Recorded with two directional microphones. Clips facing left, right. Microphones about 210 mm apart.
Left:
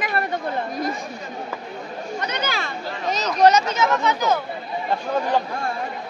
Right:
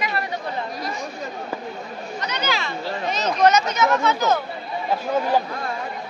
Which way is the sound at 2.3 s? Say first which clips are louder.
Right 1 dB; 50° left (ahead or behind).